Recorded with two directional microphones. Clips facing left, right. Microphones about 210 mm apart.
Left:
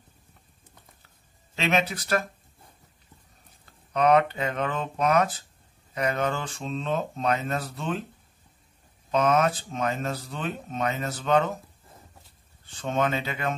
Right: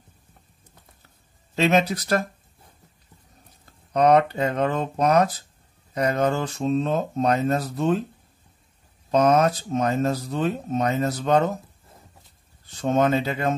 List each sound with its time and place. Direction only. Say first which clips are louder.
1.5 s speech: right 6 dB; 40° right (ahead or behind)
3.9 s speech: right 3 dB; 40° right (ahead or behind)
9.1 s speech: right 4 dB; 40° right (ahead or behind)
12.6 s speech: right 6 dB; 40° right (ahead or behind)